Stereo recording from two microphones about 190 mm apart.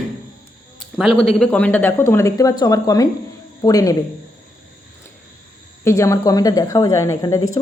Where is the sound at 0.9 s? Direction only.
Centre (ahead or behind); by 3.9 s 20° left (ahead or behind).